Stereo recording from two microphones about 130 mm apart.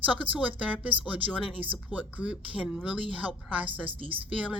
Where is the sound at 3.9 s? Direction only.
45° right (ahead or behind).